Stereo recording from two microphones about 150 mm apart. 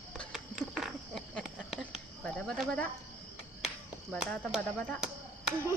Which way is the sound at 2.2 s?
5° left (ahead or behind).